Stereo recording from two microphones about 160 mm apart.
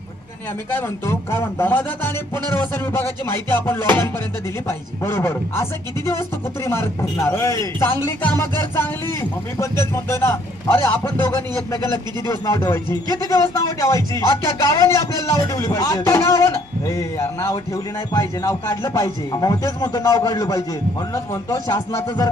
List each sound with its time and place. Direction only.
0.8 s speech: 15° left (ahead or behind)
6.7 s speech: 15° left (ahead or behind)